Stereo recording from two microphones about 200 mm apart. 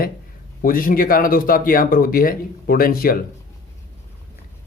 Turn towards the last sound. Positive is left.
turn(degrees=45)  # may be behind; listen again after turning